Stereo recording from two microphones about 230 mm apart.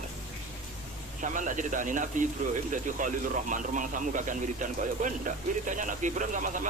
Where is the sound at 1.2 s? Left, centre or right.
Right.